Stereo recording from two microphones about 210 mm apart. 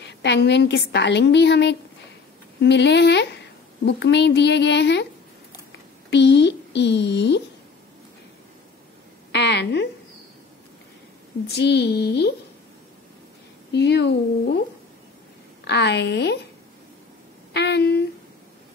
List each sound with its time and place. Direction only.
0.0 s a woman's voice: 55° left (ahead or behind)
9.3 s speech: 55° left (ahead or behind)
11.4 s speech: 50° left (ahead or behind)
13.7 s speech: 55° left (ahead or behind)
15.6 s a woman's voice: 55° left (ahead or behind)
17.5 s speech: 55° left (ahead or behind)